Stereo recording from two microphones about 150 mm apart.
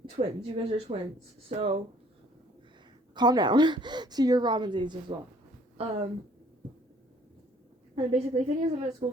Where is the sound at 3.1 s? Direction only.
30° right (ahead or behind).